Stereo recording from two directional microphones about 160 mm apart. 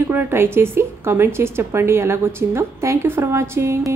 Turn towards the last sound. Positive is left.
turn(degrees=-15)  # may be behind; listen again after turning